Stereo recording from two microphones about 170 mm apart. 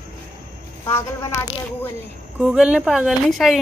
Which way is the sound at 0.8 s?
20° left (ahead or behind).